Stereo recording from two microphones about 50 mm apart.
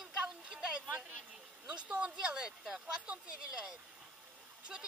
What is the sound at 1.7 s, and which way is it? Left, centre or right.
Speech, right.